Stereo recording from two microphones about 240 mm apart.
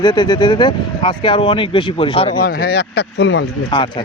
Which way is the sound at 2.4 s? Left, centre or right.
Left.